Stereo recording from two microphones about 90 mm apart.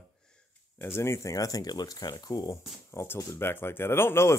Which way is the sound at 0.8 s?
30° left (ahead or behind).